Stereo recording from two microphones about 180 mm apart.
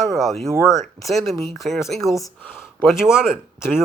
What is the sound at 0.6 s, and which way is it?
Speech, 15° left (ahead or behind).